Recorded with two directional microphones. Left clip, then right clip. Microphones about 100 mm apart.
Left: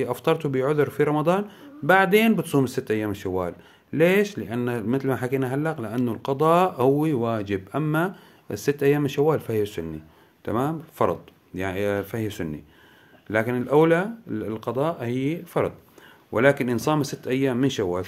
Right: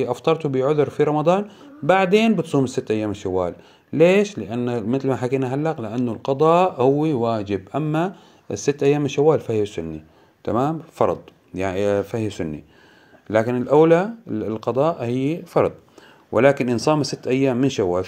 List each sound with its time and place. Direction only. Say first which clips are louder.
0.0 s speech: right 3 dB; 5° right (ahead or behind)
10.4 s speech: right 4 dB; 20° right (ahead or behind)